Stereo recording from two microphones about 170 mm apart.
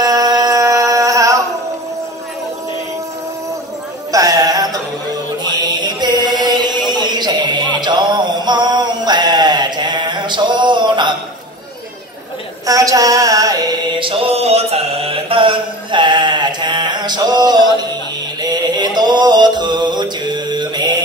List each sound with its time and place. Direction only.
0.0 s music: 20° right (ahead or behind)
4.1 s music: 20° right (ahead or behind)
5.8 s chant: 25° right (ahead or behind)
12.6 s mantra: 20° right (ahead or behind)
18.4 s music: 25° right (ahead or behind)